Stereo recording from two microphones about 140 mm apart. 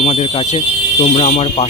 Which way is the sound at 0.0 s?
45° left (ahead or behind).